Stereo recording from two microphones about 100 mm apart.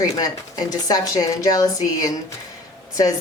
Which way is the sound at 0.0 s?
40° left (ahead or behind).